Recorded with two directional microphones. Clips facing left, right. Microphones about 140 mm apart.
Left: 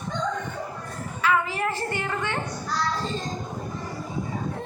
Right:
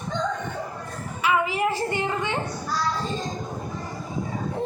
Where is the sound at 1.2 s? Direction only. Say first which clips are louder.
Right 2 dB; 15° right (ahead or behind).